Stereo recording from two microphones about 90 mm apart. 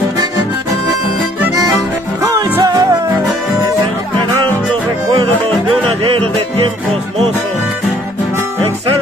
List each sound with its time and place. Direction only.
2.6 s music: 50° right (ahead or behind)
6.1 s music: 75° right (ahead or behind)